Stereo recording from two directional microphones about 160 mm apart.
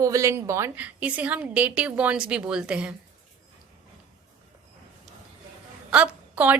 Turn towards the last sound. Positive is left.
turn(degrees=-10)  # may be behind; listen again after turning